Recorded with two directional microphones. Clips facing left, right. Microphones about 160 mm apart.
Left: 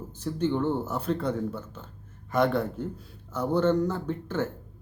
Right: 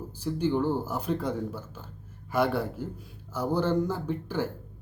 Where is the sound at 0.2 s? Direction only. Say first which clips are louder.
Even; 10° right (ahead or behind).